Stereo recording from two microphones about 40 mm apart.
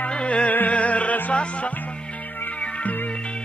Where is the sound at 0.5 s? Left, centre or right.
Left.